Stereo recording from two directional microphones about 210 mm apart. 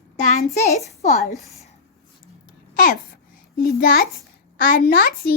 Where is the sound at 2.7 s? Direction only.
40° left (ahead or behind).